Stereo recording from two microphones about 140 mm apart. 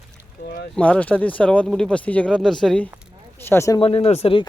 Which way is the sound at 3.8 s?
45° left (ahead or behind).